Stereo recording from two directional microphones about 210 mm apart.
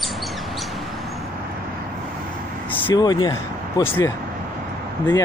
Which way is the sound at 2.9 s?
20° left (ahead or behind).